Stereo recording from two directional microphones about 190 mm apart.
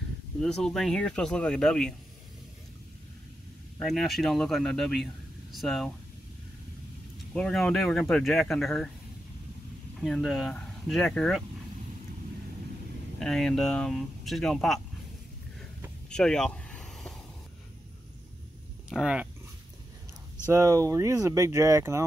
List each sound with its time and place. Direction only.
0.4 s speech: centre (ahead or behind)
3.8 s speech: centre (ahead or behind)
7.3 s speech: 5° left (ahead or behind)
9.9 s speech: centre (ahead or behind)
13.2 s speech: 5° left (ahead or behind)
16.1 s a sound: 5° left (ahead or behind)
18.9 s speech: 5° right (ahead or behind)
20.5 s speech: 15° right (ahead or behind)